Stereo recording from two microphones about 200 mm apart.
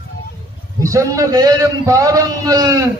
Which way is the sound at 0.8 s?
15° right (ahead or behind).